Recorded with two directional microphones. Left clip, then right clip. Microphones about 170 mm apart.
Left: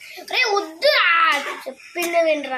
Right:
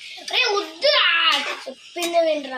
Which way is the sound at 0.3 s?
20° left (ahead or behind).